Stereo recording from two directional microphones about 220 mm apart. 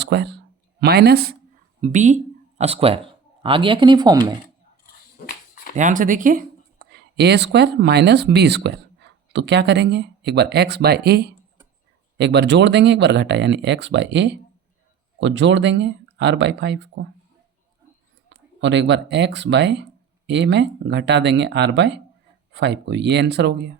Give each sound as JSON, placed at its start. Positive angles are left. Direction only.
{"t": 0.0, "sound": "speech", "side_deg": -50}
{"t": 1.8, "sound": "speech", "side_deg": -35}
{"t": 5.7, "sound": "speech", "side_deg": -35}
{"t": 18.6, "sound": "speech", "side_deg": -55}